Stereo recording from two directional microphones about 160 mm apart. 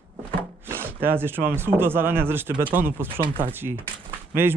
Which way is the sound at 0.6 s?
15° right (ahead or behind).